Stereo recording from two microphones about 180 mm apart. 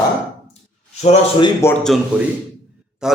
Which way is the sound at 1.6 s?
5° left (ahead or behind).